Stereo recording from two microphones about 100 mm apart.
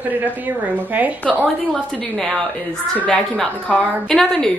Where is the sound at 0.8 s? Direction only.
15° right (ahead or behind).